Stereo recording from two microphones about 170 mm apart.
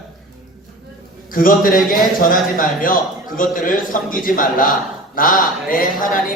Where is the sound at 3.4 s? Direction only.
55° left (ahead or behind).